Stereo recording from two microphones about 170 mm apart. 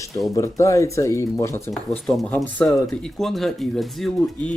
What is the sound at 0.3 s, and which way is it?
Speech, 15° left (ahead or behind).